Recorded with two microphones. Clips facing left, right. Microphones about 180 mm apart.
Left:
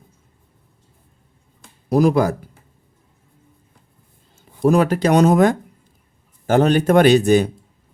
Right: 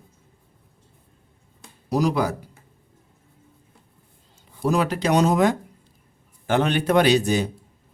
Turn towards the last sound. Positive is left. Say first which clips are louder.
# left 6 dB
turn(degrees=55)  # may be behind; listen again after turning